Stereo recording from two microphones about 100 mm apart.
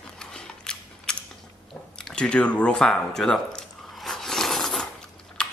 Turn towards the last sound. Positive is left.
turn(degrees=10)  # may be behind; listen again after turning